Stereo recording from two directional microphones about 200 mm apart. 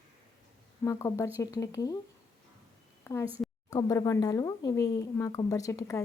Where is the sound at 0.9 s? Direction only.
15° left (ahead or behind).